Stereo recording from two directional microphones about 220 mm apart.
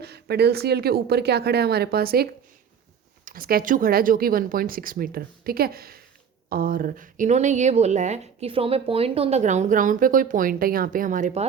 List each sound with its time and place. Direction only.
0.0 s a woman's voice: 50° right (ahead or behind)